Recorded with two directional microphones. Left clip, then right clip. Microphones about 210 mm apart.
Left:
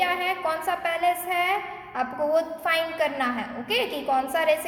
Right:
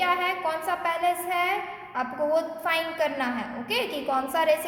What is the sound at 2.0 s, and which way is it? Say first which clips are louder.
A woman's voice: left 1 dB; 10° left (ahead or behind).